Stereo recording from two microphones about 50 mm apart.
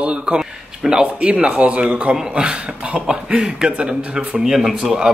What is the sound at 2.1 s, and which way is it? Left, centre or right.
Speech, centre.